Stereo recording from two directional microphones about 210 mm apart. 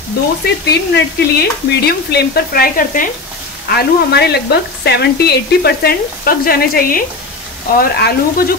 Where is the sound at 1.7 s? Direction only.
50° left (ahead or behind).